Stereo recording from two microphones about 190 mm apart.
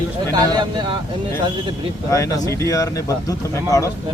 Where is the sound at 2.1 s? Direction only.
15° left (ahead or behind).